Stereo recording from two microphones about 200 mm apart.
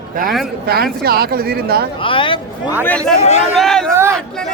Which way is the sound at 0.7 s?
50° right (ahead or behind).